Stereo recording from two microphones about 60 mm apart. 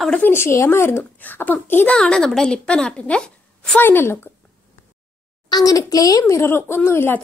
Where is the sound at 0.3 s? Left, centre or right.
Left.